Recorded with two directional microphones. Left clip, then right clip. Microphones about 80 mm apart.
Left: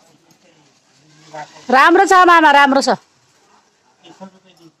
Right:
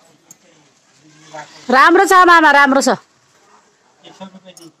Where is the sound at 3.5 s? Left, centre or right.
Right.